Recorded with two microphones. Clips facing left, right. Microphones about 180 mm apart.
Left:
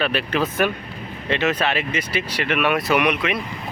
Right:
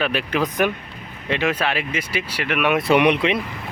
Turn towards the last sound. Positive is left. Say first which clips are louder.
# right 3 dB
turn(degrees=-30)  # may be behind; listen again after turning